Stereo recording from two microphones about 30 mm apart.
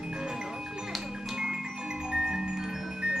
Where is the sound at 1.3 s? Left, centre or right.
Centre.